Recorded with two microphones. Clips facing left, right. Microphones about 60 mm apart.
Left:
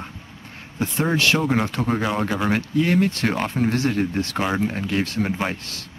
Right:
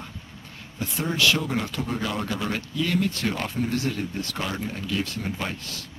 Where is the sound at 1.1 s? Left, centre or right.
Left.